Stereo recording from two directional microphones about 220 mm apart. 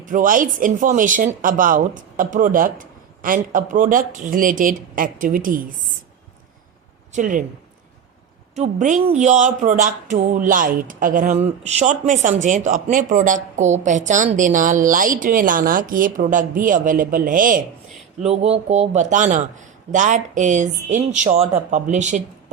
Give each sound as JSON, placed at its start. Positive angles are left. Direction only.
{"t": 0.0, "sound": "speech", "side_deg": -35}
{"t": 7.1, "sound": "speech", "side_deg": -35}
{"t": 8.5, "sound": "speech", "side_deg": -30}